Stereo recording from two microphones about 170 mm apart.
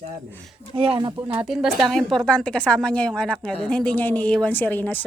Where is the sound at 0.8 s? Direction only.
30° right (ahead or behind).